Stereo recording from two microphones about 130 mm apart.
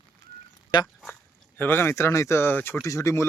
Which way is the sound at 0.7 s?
35° left (ahead or behind).